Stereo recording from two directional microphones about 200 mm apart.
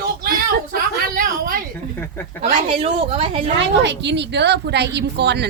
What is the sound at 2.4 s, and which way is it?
A woman's voice, 30° right (ahead or behind).